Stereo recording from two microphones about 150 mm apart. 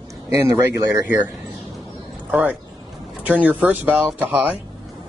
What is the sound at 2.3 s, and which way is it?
Speech, 10° right (ahead or behind).